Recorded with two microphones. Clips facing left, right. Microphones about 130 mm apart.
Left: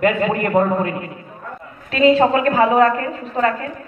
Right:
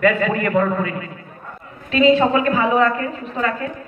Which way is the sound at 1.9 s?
40° left (ahead or behind).